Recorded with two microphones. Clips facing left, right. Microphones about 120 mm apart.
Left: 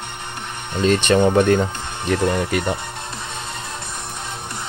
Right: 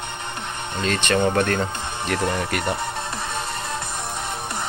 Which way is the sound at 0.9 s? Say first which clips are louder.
Left 4 dB; 20° left (ahead or behind).